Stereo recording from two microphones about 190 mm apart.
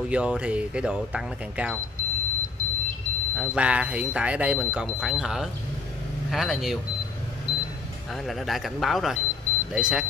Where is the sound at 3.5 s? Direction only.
5° right (ahead or behind).